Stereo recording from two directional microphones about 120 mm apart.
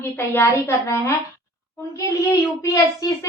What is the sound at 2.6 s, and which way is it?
Speech, 30° left (ahead or behind).